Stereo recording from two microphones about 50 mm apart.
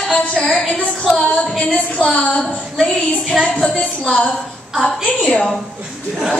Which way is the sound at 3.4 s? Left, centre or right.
Centre.